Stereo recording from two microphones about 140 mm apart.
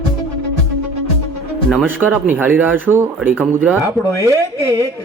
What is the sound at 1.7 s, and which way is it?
Speech, 10° right (ahead or behind).